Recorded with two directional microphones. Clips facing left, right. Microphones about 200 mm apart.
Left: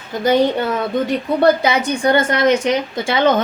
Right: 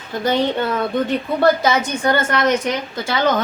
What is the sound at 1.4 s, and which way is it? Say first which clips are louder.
A woman's voice: left 1 dB; 15° left (ahead or behind).